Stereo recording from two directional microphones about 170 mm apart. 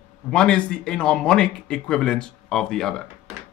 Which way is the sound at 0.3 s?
5° left (ahead or behind).